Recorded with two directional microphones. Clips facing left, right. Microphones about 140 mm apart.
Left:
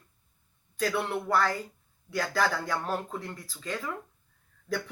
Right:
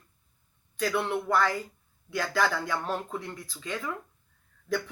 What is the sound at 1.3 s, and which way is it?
Speech, 35° left (ahead or behind).